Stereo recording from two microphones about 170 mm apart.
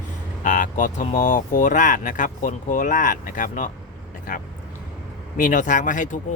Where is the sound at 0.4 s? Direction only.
50° left (ahead or behind).